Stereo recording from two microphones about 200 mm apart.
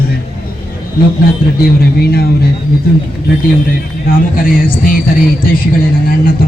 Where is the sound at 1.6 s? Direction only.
50° left (ahead or behind).